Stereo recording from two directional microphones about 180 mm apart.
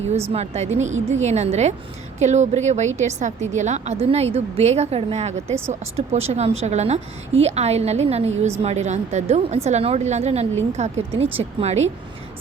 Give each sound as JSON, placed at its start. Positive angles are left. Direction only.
{"t": 0.1, "sound": "a woman's voice", "side_deg": -35}